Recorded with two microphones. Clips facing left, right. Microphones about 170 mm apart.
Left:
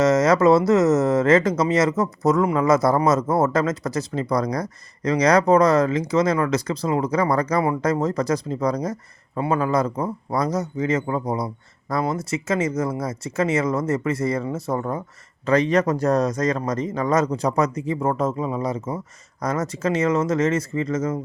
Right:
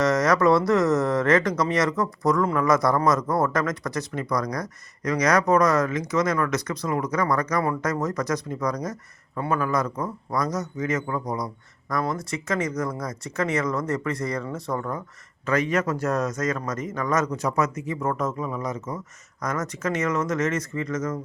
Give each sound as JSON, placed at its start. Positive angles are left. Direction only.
{"t": 0.0, "sound": "speech", "side_deg": 25}